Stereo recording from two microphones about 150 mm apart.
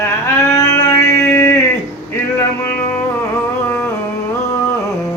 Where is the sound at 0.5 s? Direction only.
20° left (ahead or behind).